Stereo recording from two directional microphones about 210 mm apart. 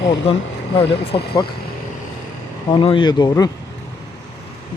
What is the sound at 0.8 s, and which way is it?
Speech, 25° left (ahead or behind).